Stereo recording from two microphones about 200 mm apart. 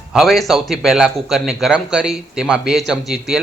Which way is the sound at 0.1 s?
Centre (ahead or behind).